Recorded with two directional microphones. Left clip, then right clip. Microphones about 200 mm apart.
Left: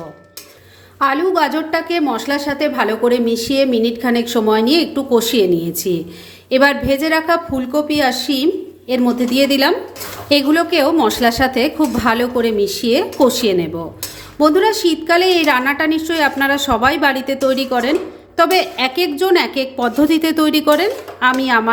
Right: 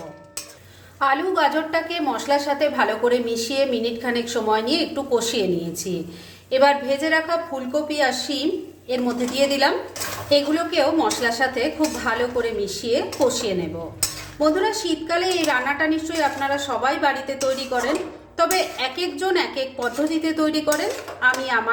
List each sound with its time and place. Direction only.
0.9 s a woman's voice: 35° left (ahead or behind)